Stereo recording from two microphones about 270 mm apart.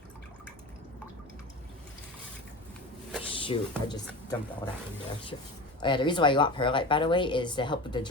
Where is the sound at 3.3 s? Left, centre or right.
Centre.